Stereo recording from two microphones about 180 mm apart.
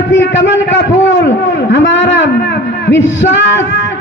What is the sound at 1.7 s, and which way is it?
A man's voice, 80° left.